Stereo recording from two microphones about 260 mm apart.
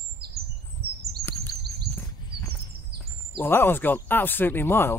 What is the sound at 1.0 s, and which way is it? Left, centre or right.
Bird vocalization, right.